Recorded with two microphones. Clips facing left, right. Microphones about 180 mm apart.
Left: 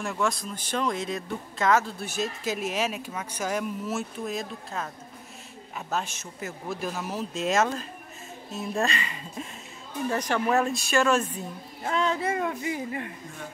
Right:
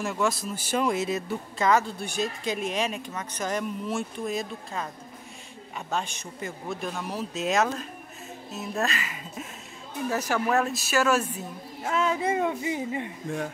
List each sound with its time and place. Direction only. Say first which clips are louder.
0.0 s speech: right 1 dB; centre (ahead or behind)
12.2 s speech: right 2 dB; 20° right (ahead or behind)